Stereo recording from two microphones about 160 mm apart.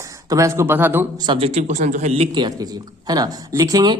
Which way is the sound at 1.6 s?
50° right (ahead or behind).